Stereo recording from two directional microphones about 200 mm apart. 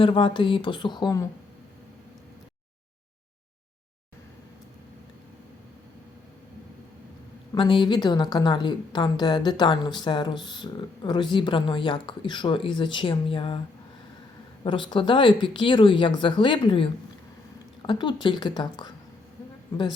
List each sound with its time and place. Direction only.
0.0 s speech: 25° left (ahead or behind)
7.5 s speech: 25° left (ahead or behind)
14.6 s speech: 25° left (ahead or behind)